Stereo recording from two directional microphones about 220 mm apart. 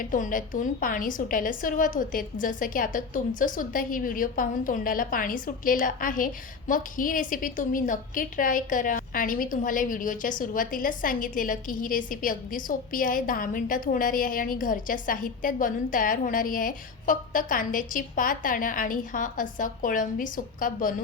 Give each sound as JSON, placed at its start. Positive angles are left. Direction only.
{"t": 0.0, "sound": "a woman's voice", "side_deg": 40}